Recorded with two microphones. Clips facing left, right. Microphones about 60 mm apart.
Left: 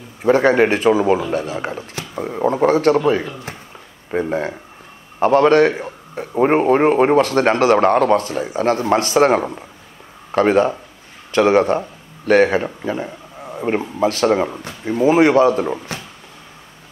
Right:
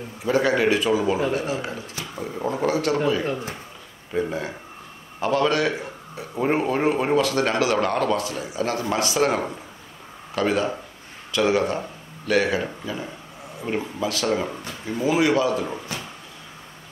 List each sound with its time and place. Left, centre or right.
0.2 s a man's voice: left
4.1 s a man's voice: left